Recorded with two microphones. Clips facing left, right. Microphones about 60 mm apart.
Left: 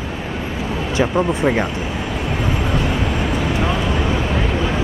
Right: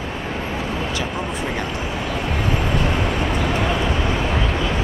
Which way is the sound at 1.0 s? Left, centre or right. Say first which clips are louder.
Left 8 dB; left.